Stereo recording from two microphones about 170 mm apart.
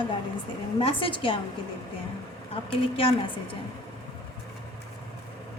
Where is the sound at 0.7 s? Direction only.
30° left (ahead or behind).